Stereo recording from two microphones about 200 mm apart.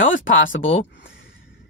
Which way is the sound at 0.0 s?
75° left (ahead or behind).